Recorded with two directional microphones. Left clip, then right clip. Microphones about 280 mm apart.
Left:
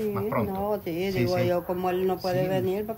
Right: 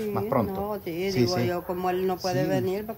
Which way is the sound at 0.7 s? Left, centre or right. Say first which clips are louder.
Left 1 dB; centre.